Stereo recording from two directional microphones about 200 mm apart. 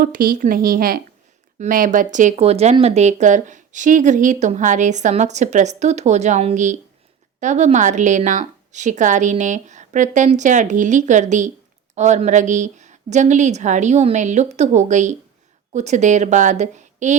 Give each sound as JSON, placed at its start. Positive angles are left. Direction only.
{"t": 0.0, "sound": "speech", "side_deg": -45}